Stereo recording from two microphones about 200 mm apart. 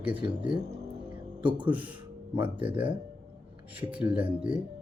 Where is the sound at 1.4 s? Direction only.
25° right (ahead or behind).